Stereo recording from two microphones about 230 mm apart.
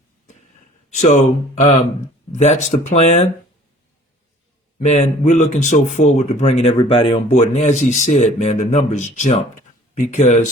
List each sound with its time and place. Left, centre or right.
0.9 s speech: left
4.8 s speech: left